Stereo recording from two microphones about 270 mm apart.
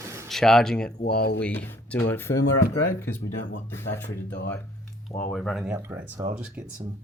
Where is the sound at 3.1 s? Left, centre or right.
Left.